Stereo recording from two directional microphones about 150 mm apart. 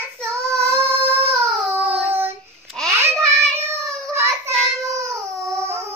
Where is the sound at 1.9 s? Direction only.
15° right (ahead or behind).